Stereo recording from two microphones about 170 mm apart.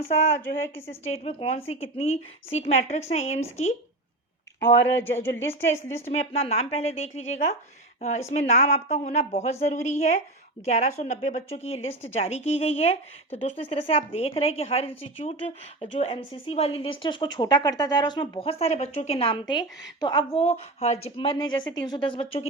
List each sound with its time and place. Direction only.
0.6 s speech: 15° left (ahead or behind)
1.0 s a woman's voice: 40° left (ahead or behind)
4.9 s speech: 15° left (ahead or behind)
6.1 s a woman's voice: 35° left (ahead or behind)